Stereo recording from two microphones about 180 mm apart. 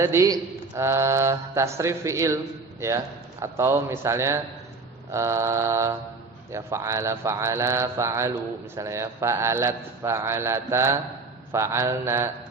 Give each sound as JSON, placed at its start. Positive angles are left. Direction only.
{"t": 0.0, "sound": "a man's voice", "side_deg": -15}